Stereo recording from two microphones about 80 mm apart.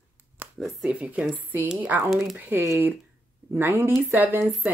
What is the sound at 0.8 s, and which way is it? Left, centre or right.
Speech, centre.